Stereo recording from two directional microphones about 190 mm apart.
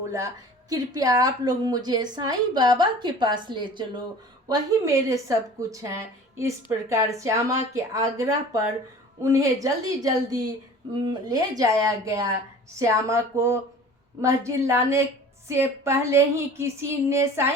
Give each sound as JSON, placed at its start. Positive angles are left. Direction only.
{"t": 0.9, "sound": "a woman's voice", "side_deg": -20}